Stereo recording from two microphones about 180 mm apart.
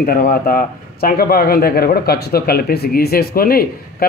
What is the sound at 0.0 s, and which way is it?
A man's voice, 55° left (ahead or behind).